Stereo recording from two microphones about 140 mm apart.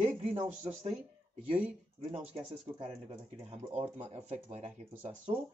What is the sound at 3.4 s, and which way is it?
Speech, 45° right (ahead or behind).